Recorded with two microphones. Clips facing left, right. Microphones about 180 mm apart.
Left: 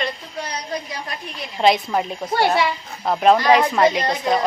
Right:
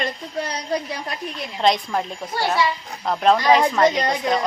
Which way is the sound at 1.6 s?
5° left (ahead or behind).